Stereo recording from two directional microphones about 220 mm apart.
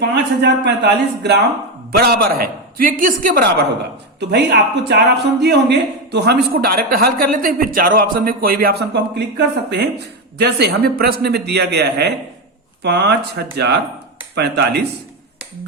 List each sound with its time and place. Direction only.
0.0 s a man's voice: 50° right (ahead or behind)
4.2 s a man's voice: 50° right (ahead or behind)